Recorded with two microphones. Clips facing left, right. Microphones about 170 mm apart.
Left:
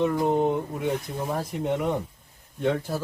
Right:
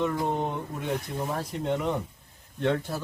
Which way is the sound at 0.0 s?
15° left (ahead or behind).